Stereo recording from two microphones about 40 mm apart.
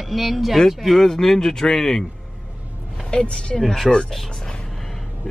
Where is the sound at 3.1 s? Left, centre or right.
Left.